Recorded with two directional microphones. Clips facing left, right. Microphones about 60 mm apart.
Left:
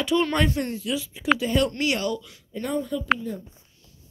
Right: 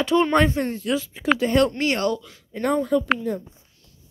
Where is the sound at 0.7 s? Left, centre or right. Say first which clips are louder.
Right 4 dB; right.